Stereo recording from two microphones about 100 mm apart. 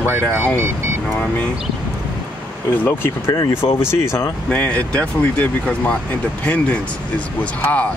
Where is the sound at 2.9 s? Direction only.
25° left (ahead or behind).